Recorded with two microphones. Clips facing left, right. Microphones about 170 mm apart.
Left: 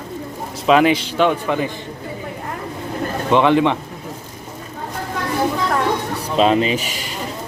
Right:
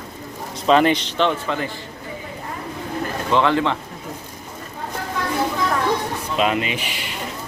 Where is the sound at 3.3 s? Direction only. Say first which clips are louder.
Left 4 dB; 15° left (ahead or behind).